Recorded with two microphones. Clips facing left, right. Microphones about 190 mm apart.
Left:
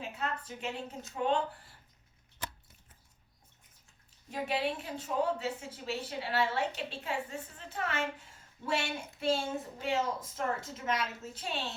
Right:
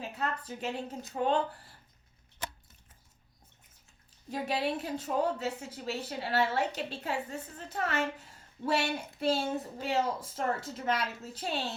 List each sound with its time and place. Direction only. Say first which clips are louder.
0.2 s a woman's voice: right 3 dB; 35° right (ahead or behind)
4.3 s a woman's voice: right 2 dB; 40° right (ahead or behind)